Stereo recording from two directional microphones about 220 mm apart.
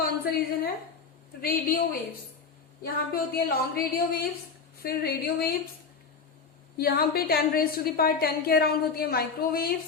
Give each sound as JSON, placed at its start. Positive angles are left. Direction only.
{"t": 0.3, "sound": "a woman's voice", "side_deg": 40}
{"t": 6.7, "sound": "a woman's voice", "side_deg": 45}